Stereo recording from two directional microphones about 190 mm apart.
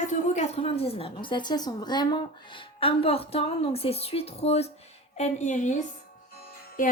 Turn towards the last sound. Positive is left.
turn(degrees=45)  # may be behind; listen again after turning